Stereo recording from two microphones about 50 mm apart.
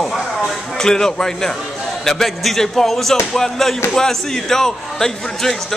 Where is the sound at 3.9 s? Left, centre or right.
Centre.